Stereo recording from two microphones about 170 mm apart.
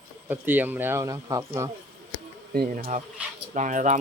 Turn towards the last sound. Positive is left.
turn(degrees=-50)  # may be behind; listen again after turning